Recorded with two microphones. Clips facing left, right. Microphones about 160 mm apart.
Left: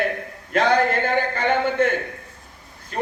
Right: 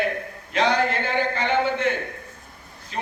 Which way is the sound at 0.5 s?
50° left (ahead or behind).